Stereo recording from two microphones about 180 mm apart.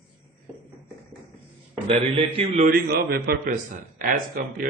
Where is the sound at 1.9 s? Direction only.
35° right (ahead or behind).